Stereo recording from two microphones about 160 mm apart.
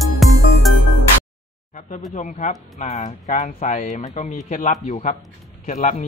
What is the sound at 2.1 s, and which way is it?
Speech, 50° left (ahead or behind).